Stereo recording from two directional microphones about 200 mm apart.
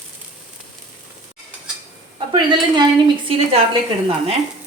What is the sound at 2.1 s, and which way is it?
A woman's voice, 25° right (ahead or behind).